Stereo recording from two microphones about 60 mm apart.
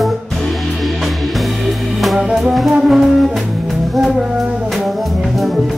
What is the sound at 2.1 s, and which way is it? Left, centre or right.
Music, centre.